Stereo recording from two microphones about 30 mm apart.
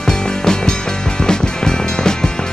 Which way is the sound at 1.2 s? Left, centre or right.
Left.